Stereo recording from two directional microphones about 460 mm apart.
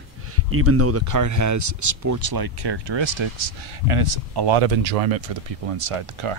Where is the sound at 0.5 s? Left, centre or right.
Right.